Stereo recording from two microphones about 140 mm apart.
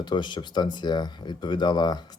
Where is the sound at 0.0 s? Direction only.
35° left (ahead or behind).